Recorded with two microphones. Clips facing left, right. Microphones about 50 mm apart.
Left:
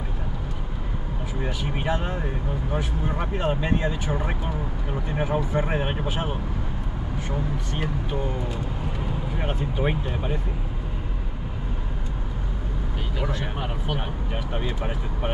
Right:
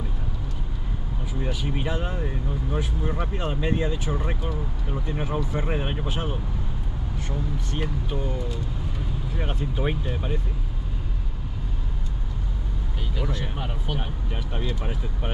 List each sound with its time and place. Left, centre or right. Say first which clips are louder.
1.4 s speech: even; left
3.2 s speech: left 3 dB; centre
7.2 s speech: left 2 dB; centre
9.5 s speech: left 2 dB; centre
14.6 s speech: left 2 dB; left